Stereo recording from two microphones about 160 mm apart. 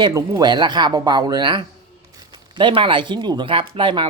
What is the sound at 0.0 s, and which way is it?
Speech, 20° right (ahead or behind).